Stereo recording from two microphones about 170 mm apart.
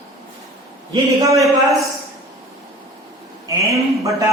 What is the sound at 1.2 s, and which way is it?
Speech, 20° right (ahead or behind).